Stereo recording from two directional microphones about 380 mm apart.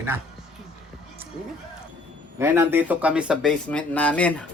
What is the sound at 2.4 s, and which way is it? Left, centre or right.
Speech, centre.